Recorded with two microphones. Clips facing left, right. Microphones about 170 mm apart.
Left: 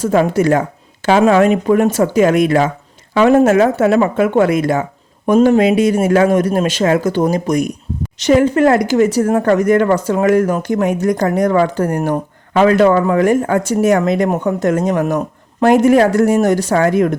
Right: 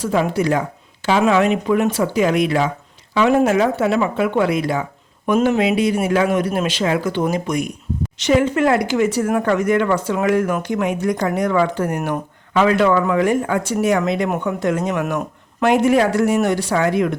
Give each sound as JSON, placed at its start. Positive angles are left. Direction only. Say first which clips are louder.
{"t": 0.0, "sound": "speech", "louder": "left 5 dB", "side_deg": 45}